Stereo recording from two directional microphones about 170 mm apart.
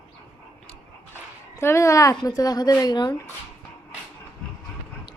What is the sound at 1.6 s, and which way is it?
A woman's voice, 15° left (ahead or behind).